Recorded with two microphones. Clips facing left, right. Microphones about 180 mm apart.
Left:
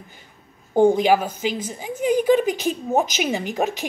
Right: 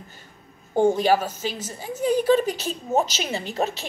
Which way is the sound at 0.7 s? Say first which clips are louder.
Left 3 dB; 15° left (ahead or behind).